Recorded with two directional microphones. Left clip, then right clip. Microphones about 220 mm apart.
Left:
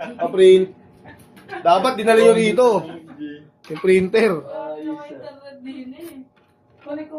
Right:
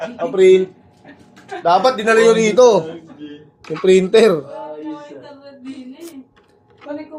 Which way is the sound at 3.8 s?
20° right (ahead or behind).